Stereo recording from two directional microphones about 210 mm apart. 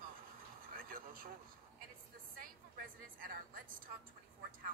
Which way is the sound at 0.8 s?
40° right (ahead or behind).